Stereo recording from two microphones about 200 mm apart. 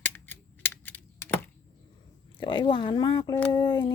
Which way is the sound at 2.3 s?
25° left (ahead or behind).